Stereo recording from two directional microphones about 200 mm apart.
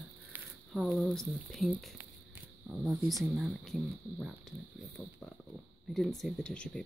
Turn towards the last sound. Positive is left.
turn(degrees=5)  # may be behind; listen again after turning